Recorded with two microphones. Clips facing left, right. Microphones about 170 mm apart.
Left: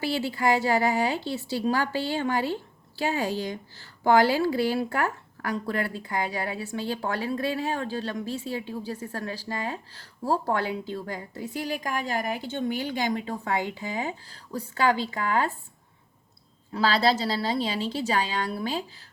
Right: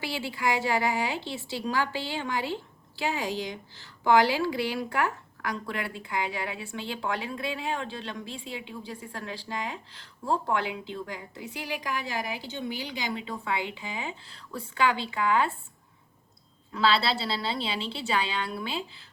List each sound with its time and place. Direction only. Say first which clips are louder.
0.0 s a woman's voice: left 5 dB; 40° left (ahead or behind)
16.7 s a woman's voice: left 3 dB; 40° left (ahead or behind)